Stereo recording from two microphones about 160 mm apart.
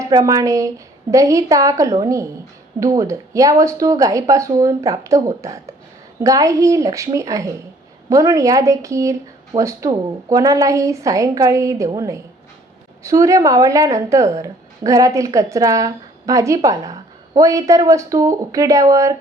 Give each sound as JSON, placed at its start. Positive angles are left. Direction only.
{"t": 0.0, "sound": "speech", "side_deg": -20}